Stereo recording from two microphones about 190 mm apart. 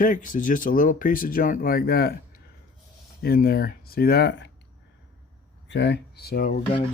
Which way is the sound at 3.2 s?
55° left (ahead or behind).